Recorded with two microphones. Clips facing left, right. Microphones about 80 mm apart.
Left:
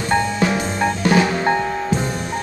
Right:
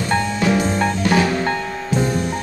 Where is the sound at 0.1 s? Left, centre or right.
Centre.